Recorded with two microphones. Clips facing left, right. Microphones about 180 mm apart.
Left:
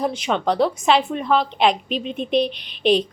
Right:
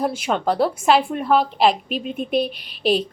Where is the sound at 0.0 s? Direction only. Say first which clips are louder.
Even; 5° right (ahead or behind).